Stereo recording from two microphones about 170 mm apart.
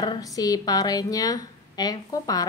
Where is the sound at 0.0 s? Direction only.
25° left (ahead or behind).